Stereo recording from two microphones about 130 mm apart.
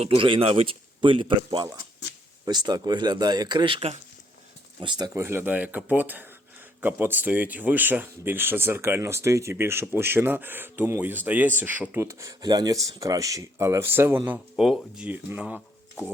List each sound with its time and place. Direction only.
0.0 s speech: 45° right (ahead or behind)
5.2 s speech: 15° right (ahead or behind)
14.3 s speech: centre (ahead or behind)